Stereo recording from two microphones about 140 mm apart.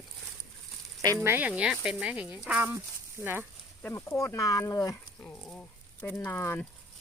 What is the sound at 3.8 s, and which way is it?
Speech, 20° left (ahead or behind).